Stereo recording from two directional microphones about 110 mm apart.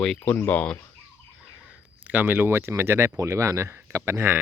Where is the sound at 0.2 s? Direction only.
15° left (ahead or behind).